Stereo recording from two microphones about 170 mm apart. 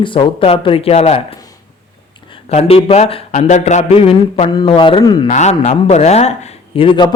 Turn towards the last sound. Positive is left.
turn(degrees=25)  # may be behind; listen again after turning